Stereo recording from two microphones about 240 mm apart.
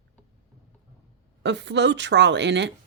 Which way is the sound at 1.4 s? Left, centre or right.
Right.